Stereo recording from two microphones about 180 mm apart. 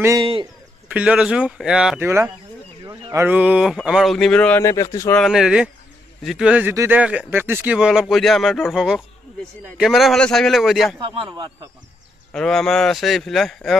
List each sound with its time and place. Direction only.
0.2 s speech: 30° right (ahead or behind)
0.8 s speech: 5° right (ahead or behind)
2.0 s speech: 15° right (ahead or behind); by 5.1 s 15° left (ahead or behind)
5.1 s speech: centre (ahead or behind)
11.2 s speech: 20° right (ahead or behind)
12.3 s speech: 5° left (ahead or behind)